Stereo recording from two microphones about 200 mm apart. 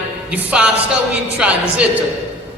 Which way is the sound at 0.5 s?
5° right (ahead or behind).